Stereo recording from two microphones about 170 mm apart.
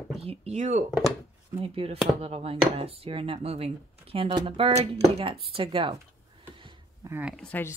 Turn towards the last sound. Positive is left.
turn(degrees=10)  # may be behind; listen again after turning